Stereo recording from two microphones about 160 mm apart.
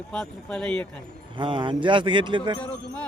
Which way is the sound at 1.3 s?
30° right (ahead or behind).